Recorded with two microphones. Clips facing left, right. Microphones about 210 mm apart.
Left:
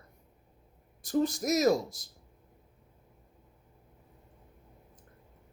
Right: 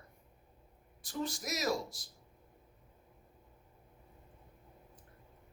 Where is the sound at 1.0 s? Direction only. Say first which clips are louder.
Left 11 dB; 40° left (ahead or behind).